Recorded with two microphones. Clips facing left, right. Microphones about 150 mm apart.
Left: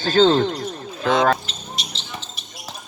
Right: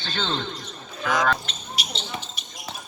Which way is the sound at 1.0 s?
25° left (ahead or behind).